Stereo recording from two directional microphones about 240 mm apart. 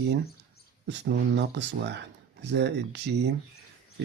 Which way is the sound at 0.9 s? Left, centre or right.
Right.